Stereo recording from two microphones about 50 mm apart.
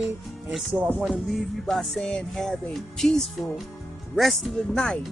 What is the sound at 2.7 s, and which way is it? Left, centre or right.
Speech, centre.